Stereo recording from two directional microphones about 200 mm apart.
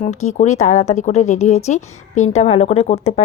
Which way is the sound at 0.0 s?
35° left (ahead or behind).